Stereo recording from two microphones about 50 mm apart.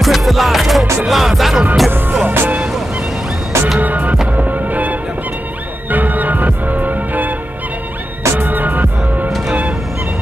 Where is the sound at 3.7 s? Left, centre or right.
Right.